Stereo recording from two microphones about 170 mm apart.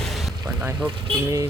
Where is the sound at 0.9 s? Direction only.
30° right (ahead or behind).